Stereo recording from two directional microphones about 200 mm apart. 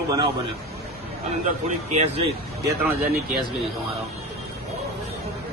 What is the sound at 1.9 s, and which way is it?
Speech, 30° right (ahead or behind).